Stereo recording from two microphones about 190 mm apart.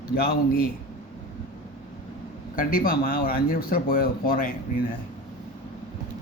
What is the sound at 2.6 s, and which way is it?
Speech, 50° left (ahead or behind).